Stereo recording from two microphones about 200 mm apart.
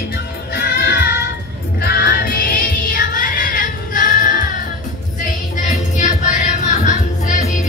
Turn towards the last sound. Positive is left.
turn(degrees=40)  # may be behind; listen again after turning